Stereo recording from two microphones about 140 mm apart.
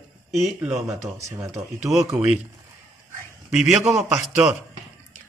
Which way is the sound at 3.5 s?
5° right (ahead or behind).